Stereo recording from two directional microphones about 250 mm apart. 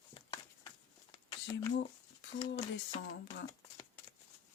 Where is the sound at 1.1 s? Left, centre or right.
Centre.